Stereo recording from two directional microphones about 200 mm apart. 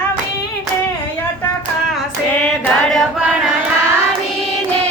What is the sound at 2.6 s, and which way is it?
Singing, centre (ahead or behind).